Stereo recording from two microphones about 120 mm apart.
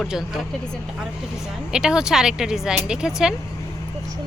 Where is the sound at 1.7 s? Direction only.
5° right (ahead or behind).